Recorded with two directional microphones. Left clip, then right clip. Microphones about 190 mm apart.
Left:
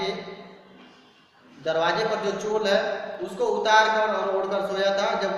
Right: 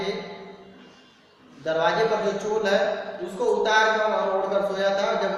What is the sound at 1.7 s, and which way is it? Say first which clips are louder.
Speech: right 1 dB; 15° left (ahead or behind).